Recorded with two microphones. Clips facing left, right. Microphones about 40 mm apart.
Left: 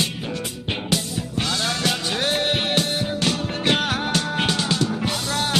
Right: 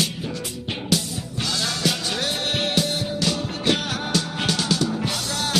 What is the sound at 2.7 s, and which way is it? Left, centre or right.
Music, left.